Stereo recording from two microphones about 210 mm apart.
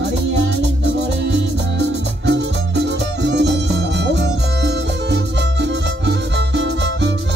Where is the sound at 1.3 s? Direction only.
55° right (ahead or behind).